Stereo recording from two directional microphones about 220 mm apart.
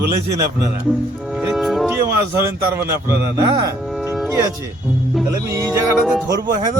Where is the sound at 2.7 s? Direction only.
15° right (ahead or behind).